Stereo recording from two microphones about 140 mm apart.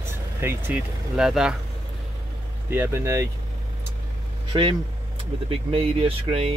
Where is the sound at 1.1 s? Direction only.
5° right (ahead or behind).